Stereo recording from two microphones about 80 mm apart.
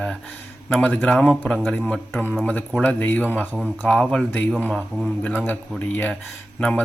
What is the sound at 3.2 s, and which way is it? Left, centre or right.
Speech, centre.